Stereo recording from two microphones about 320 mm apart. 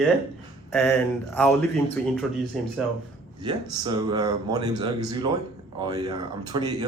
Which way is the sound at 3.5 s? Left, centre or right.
Centre.